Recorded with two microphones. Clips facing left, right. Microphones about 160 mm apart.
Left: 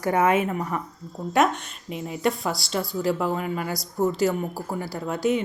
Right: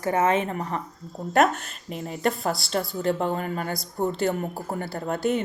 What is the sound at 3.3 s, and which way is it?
Speech, 40° right (ahead or behind).